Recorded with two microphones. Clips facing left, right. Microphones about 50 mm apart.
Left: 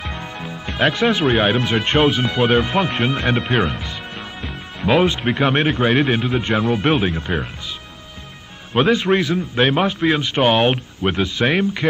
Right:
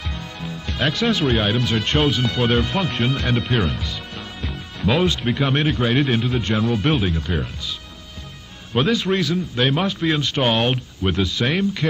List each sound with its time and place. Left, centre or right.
0.0 s a man's voice: left
8.7 s a man's voice: left